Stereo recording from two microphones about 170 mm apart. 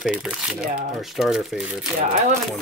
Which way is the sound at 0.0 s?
Centre (ahead or behind).